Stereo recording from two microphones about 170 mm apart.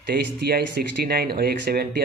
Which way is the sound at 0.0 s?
70° right (ahead or behind).